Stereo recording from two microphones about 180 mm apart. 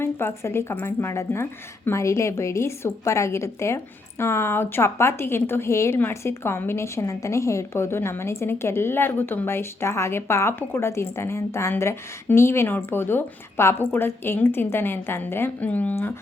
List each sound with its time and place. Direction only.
0.0 s a woman's voice: 15° left (ahead or behind)